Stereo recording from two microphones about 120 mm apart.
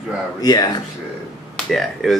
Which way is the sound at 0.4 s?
35° left (ahead or behind).